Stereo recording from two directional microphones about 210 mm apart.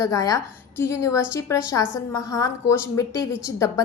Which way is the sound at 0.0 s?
15° left (ahead or behind).